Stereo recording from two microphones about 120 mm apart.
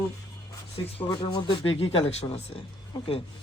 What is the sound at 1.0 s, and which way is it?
Speech, 40° left (ahead or behind).